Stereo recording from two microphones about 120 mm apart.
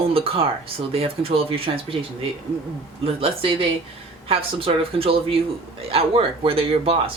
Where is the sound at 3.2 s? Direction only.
50° right (ahead or behind).